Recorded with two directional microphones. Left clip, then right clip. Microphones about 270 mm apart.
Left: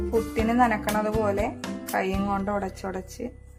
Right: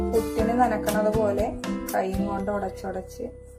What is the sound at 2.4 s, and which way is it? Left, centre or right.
Speech, left.